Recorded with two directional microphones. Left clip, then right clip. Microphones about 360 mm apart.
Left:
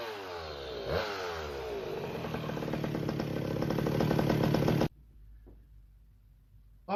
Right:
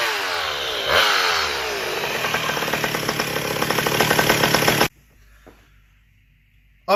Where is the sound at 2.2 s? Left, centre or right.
Centre.